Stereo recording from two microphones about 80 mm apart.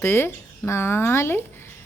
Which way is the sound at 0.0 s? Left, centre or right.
Left.